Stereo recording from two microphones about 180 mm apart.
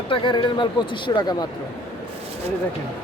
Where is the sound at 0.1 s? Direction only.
25° left (ahead or behind).